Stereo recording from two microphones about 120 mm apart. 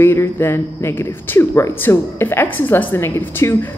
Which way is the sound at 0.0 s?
20° left (ahead or behind).